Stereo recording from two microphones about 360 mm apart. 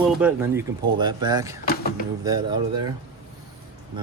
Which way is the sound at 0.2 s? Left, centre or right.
Centre.